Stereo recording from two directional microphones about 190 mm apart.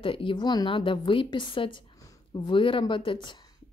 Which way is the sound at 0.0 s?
25° left (ahead or behind).